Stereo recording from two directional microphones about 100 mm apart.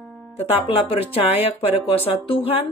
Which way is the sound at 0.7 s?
75° left (ahead or behind).